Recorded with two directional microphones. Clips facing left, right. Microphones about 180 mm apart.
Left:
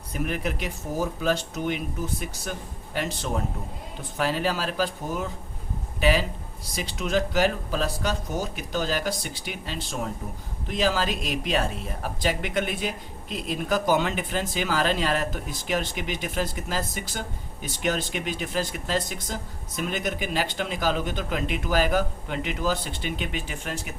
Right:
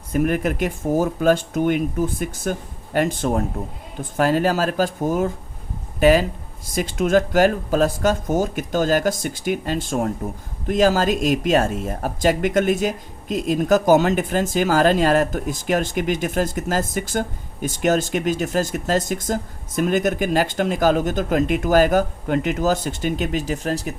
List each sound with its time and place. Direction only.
0.1 s speech: 50° right (ahead or behind)